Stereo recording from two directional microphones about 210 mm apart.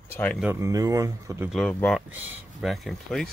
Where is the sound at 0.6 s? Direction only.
15° right (ahead or behind).